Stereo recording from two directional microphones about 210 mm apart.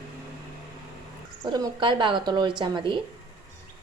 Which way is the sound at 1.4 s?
20° right (ahead or behind).